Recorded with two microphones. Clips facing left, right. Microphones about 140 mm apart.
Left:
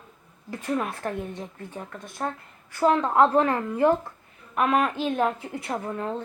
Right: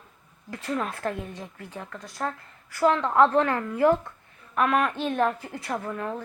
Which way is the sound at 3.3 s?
25° left (ahead or behind).